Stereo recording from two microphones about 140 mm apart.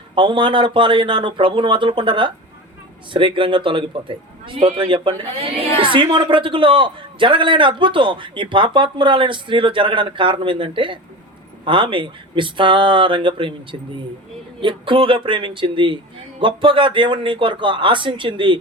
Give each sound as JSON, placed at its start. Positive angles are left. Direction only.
{"t": 0.1, "sound": "a woman's voice", "side_deg": -35}